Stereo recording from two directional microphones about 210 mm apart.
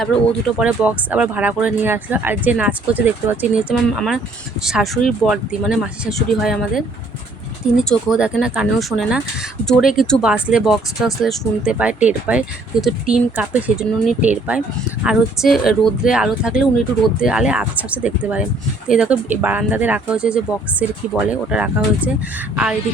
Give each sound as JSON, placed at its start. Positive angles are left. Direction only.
{"t": 0.6, "sound": "speech", "side_deg": -5}